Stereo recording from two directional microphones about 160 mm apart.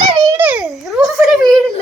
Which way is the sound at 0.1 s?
25° right (ahead or behind).